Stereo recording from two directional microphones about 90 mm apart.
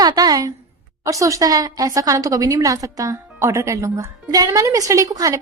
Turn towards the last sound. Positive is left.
turn(degrees=-40)  # may be behind; listen again after turning